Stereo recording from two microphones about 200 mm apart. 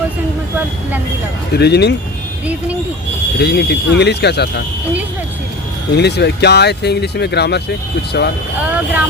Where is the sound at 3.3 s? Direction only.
55° left (ahead or behind).